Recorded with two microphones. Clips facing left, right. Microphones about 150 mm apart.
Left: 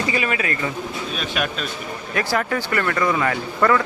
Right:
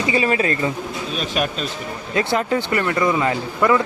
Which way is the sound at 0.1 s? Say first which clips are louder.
Right 4 dB; 30° right (ahead or behind).